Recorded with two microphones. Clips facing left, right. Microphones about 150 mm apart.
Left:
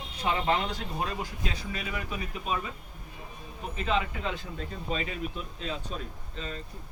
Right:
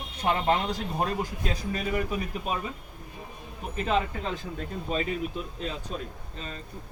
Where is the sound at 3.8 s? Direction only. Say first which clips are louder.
Right 2 dB; 40° right (ahead or behind).